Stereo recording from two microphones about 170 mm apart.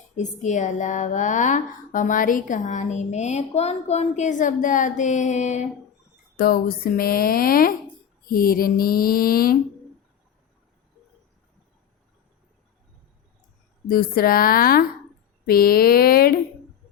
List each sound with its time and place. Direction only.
0.2 s speech: 45° left (ahead or behind)
6.3 s speech: 65° left (ahead or behind)
13.8 s speech: 60° left (ahead or behind)